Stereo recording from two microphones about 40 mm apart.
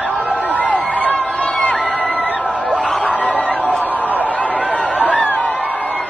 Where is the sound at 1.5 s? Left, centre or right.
Left.